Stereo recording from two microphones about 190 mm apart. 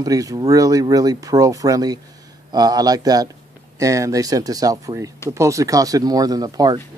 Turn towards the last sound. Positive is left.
turn(degrees=-20)  # may be behind; listen again after turning